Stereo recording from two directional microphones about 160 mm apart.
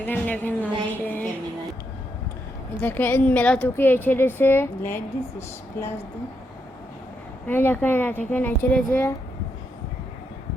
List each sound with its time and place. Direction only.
0.0 s a woman's voice: 10° left (ahead or behind)
1.0 s a sound: 10° left (ahead or behind)
2.8 s a woman's voice: 10° left (ahead or behind)
7.4 s a woman's voice: 10° left (ahead or behind)